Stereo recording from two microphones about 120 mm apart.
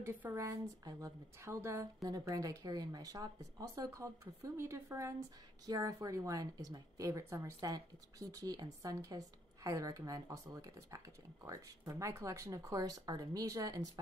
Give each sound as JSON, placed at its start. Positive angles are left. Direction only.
{"t": 0.0, "sound": "a woman's voice", "side_deg": -20}
{"t": 2.0, "sound": "a woman's voice", "side_deg": -30}